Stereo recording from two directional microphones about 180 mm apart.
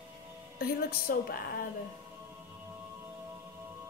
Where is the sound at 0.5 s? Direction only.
55° left (ahead or behind).